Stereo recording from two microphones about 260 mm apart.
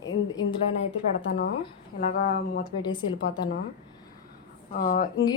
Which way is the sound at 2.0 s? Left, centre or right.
Left.